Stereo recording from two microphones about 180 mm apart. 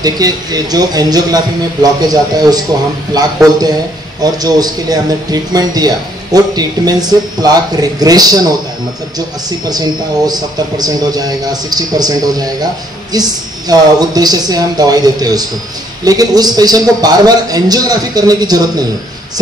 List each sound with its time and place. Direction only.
0.0 s speech: 20° right (ahead or behind)
9.7 s speech: 20° right (ahead or behind)